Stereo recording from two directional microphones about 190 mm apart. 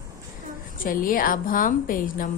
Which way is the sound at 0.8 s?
50° left (ahead or behind).